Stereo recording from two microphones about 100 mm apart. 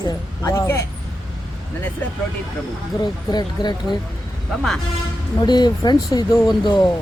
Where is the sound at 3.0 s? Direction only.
45° left (ahead or behind).